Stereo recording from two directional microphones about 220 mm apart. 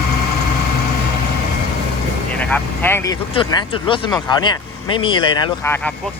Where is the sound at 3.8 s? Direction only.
20° left (ahead or behind).